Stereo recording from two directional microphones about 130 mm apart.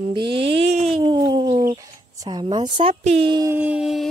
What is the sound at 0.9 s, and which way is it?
Speech, 30° right (ahead or behind).